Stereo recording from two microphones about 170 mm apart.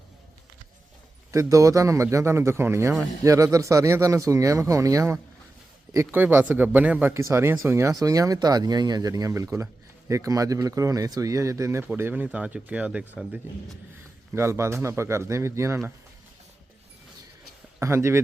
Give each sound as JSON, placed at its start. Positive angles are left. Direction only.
{"t": 1.3, "sound": "speech", "side_deg": -20}
{"t": 17.7, "sound": "speech", "side_deg": -15}